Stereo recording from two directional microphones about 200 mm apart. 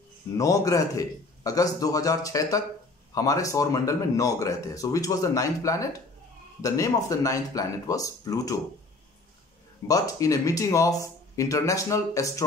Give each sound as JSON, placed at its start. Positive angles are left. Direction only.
{"t": 0.4, "sound": "speech", "side_deg": 15}
{"t": 9.8, "sound": "speech", "side_deg": 15}